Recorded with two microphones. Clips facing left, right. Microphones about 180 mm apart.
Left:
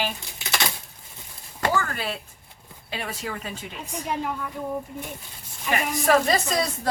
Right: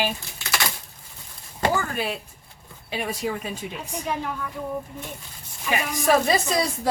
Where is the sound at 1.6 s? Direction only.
15° right (ahead or behind).